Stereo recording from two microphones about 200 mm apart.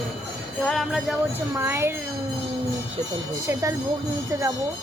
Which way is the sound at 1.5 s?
10° right (ahead or behind).